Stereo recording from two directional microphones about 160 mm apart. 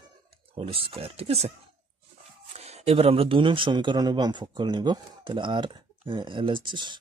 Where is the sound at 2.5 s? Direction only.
40° right (ahead or behind).